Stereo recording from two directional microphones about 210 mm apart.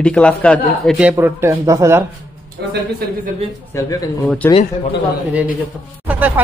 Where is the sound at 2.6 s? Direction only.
55° right (ahead or behind).